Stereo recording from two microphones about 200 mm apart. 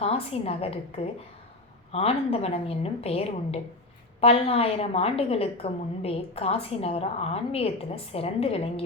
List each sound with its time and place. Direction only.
0.0 s a woman's voice: 30° left (ahead or behind)